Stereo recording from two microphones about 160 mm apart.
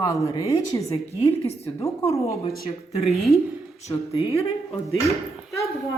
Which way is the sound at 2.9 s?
40° left (ahead or behind).